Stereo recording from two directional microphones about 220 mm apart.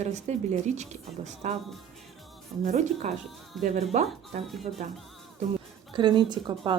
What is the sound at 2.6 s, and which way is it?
Speech, 35° right (ahead or behind).